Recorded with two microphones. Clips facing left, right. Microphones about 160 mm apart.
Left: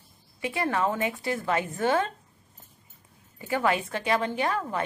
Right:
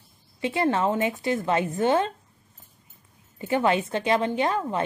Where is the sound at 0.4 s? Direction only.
25° right (ahead or behind).